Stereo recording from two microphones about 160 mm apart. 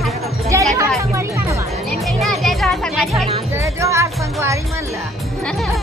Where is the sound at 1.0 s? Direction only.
20° right (ahead or behind).